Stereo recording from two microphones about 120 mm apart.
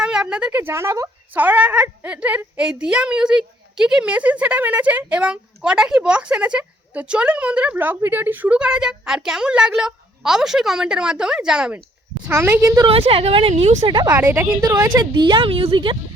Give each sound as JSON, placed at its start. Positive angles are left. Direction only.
{"t": 0.0, "sound": "speech", "side_deg": -5}
{"t": 12.3, "sound": "a woman's voice", "side_deg": -20}
{"t": 12.9, "sound": "a woman's voice", "side_deg": -50}
{"t": 13.5, "sound": "speech", "side_deg": -70}
{"t": 13.8, "sound": "a woman's voice", "side_deg": -35}
{"t": 14.1, "sound": "speech", "side_deg": -20}
{"t": 14.6, "sound": "a woman's voice", "side_deg": -30}